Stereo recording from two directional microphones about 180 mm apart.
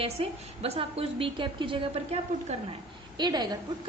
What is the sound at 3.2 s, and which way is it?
Speech, 25° right (ahead or behind).